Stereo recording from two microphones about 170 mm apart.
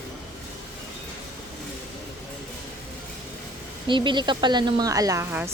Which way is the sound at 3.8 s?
30° right (ahead or behind).